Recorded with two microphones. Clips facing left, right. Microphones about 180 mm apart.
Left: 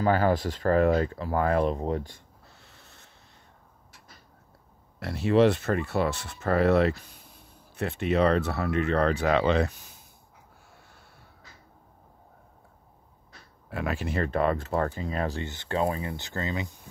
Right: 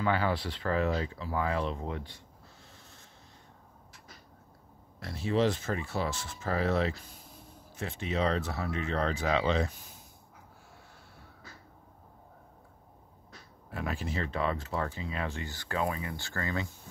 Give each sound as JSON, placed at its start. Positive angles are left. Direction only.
{"t": 0.0, "sound": "speech", "side_deg": 45}
{"t": 2.6, "sound": "a sound", "side_deg": 65}
{"t": 5.0, "sound": "speech", "side_deg": 65}
{"t": 13.7, "sound": "speech", "side_deg": 70}
{"t": 15.4, "sound": "speech", "side_deg": 25}
{"t": 16.2, "sound": "speech", "side_deg": 20}